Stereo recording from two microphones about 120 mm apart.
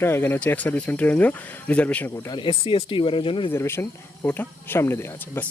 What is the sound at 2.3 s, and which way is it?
Speech, 45° left (ahead or behind).